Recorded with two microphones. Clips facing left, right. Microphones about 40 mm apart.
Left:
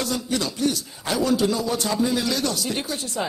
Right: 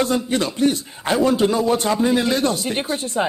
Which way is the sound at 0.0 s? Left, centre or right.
Right.